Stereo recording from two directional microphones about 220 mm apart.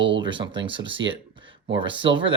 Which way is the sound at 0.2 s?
20° right (ahead or behind).